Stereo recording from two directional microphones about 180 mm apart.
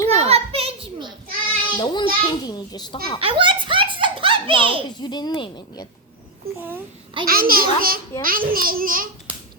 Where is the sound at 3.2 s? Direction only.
30° right (ahead or behind).